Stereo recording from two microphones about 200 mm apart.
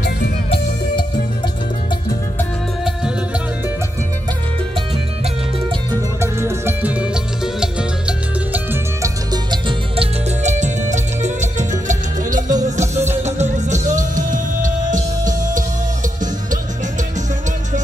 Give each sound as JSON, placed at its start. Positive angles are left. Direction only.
{"t": 6.4, "sound": "music", "side_deg": -10}
{"t": 9.0, "sound": "music", "side_deg": -20}
{"t": 10.4, "sound": "music", "side_deg": -35}